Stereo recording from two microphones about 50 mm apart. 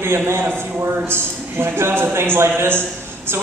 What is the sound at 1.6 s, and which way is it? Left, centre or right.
A man's voice, right.